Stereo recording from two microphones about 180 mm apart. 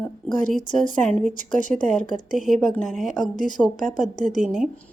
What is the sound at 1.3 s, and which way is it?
Speech, 50° left (ahead or behind).